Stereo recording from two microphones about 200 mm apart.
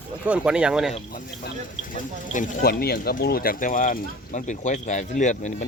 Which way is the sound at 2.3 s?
45° left (ahead or behind).